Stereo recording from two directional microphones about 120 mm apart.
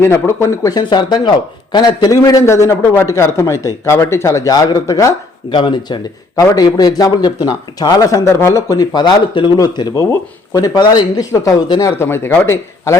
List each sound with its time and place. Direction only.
0.0 s a man's voice: 20° left (ahead or behind)
5.5 s a man's voice: 40° left (ahead or behind); by 13.0 s 20° left (ahead or behind)